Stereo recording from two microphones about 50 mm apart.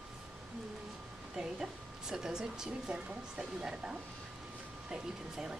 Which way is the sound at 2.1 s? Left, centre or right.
Centre.